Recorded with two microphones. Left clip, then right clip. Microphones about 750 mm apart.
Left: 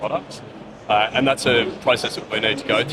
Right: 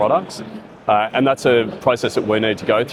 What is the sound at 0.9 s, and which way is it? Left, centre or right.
Speech, right.